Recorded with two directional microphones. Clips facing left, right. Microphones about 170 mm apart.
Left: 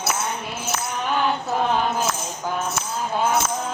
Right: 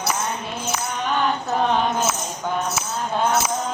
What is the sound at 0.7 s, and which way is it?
Music, centre (ahead or behind).